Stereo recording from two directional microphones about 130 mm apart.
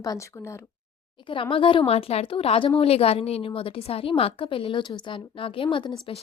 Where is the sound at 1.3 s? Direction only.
40° left (ahead or behind).